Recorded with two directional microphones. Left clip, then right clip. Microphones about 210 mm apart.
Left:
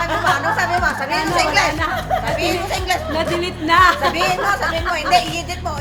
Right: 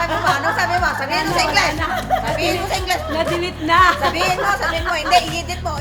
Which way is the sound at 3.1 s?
15° left (ahead or behind).